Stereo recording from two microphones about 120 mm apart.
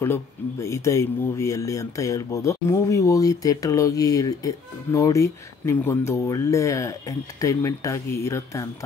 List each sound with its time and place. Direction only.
0.0 s speech: 20° left (ahead or behind)